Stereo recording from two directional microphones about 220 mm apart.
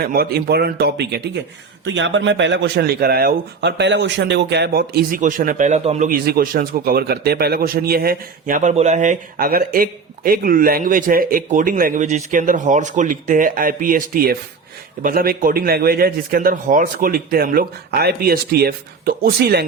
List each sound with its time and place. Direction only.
0.0 s speech: 45° right (ahead or behind)